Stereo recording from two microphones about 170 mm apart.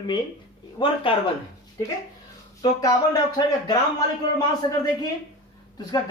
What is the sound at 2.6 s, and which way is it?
Speech, 20° left (ahead or behind).